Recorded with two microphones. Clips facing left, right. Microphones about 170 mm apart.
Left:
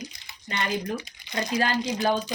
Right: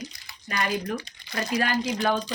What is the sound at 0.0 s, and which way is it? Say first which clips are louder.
Crumpling: right 1 dB; 25° left (ahead or behind).